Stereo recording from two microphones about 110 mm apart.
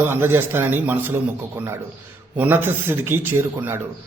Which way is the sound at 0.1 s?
20° right (ahead or behind).